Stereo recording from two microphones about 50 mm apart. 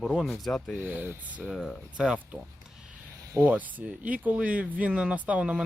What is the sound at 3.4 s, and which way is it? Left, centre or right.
Speech, right.